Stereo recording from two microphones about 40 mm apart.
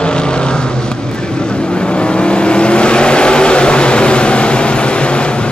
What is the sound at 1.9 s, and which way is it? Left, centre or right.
Vehicle, left.